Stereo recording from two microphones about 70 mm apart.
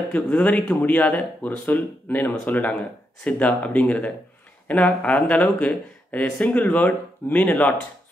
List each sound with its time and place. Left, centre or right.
0.1 s speech: left